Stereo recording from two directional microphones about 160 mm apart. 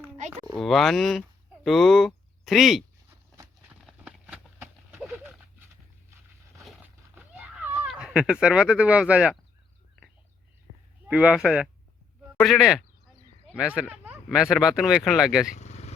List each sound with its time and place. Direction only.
0.6 s speech: centre (ahead or behind)
4.0 s horse: 15° right (ahead or behind)
5.0 s dog: 10° right (ahead or behind)
6.8 s a sound: 10° right (ahead or behind)
7.9 s speech: 5° right (ahead or behind)
11.1 s speech: 5° right (ahead or behind)
15.5 s vehicle: 45° left (ahead or behind)